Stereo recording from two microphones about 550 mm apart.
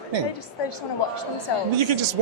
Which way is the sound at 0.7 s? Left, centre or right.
Left.